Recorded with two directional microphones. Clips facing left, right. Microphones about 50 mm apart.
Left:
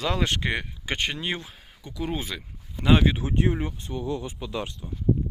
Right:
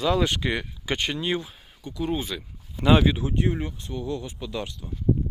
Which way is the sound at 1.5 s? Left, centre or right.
Left.